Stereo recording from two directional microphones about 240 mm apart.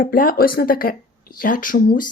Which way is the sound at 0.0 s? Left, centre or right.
Left.